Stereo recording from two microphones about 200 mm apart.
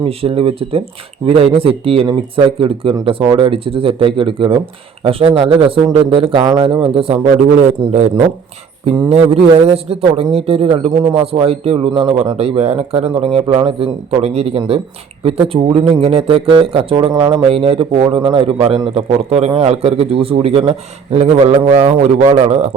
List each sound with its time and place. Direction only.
0.0 s speech: 30° right (ahead or behind)